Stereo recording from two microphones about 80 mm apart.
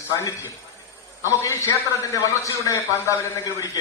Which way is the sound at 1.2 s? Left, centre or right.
Left.